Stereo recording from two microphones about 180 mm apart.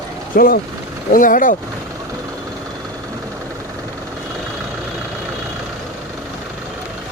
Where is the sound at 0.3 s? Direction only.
55° left (ahead or behind).